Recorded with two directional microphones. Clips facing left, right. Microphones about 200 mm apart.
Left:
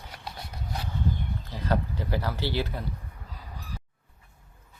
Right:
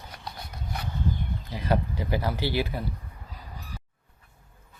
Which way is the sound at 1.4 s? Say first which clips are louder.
Right 2 dB; 10° right (ahead or behind).